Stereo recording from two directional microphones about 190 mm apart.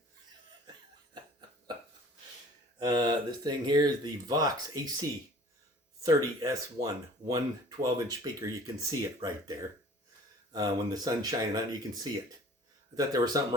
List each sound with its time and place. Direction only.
1.1 s cough: 25° right (ahead or behind)
2.7 s speech: 20° right (ahead or behind)